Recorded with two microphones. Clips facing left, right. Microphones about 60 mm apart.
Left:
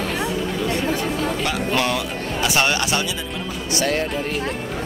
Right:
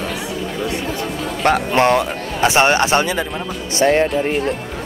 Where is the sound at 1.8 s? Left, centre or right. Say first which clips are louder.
Right 7 dB; right.